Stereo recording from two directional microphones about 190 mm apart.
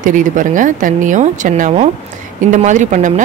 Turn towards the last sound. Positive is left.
turn(degrees=-40)  # may be behind; listen again after turning